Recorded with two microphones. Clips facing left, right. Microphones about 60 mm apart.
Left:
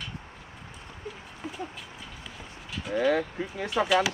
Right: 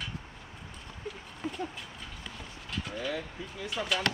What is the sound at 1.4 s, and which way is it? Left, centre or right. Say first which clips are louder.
Horse: right 2 dB; centre.